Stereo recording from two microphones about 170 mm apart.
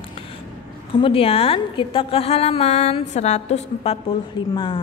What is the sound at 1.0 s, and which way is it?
A woman's voice, 35° left (ahead or behind).